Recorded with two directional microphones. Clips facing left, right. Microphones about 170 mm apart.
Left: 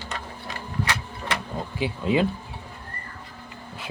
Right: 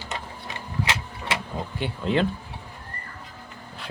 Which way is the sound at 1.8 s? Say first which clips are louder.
Left 2 dB; 5° left (ahead or behind).